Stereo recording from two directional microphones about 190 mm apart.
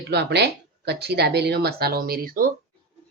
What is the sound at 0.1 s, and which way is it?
Speech, 65° right (ahead or behind).